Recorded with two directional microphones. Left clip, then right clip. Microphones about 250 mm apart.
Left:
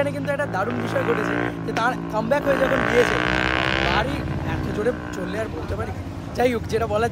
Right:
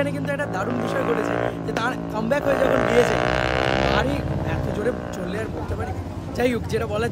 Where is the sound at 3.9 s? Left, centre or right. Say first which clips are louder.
Right 1 dB; centre.